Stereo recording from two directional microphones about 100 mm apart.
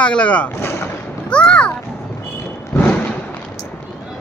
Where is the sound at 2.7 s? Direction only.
15° left (ahead or behind).